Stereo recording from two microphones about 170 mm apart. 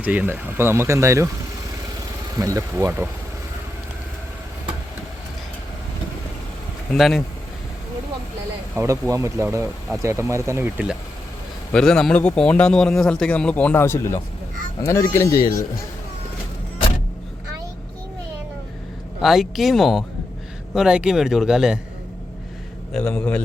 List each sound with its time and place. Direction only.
0.0 s speech: 10° right (ahead or behind)
2.4 s speech: 20° right (ahead or behind)
6.9 s a man's voice: centre (ahead or behind)
8.7 s speech: 15° right (ahead or behind)
11.7 s a man's voice: 5° left (ahead or behind); by 15.6 s 20° left (ahead or behind)
19.2 s a man's voice: centre (ahead or behind)
22.9 s a man's voice: 5° left (ahead or behind)